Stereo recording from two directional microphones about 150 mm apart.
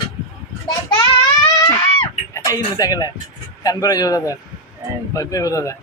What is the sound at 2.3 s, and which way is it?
A man's voice, 25° left (ahead or behind).